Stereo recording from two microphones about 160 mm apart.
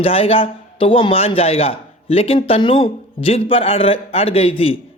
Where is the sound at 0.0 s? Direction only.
35° left (ahead or behind).